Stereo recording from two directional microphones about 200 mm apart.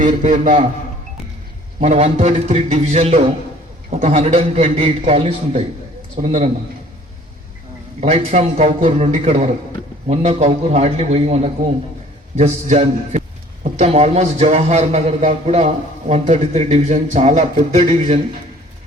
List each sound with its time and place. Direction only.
0.0 s a man's voice: 40° right (ahead or behind)
1.8 s a man's voice: 35° right (ahead or behind)
8.0 s a man's voice: 30° right (ahead or behind)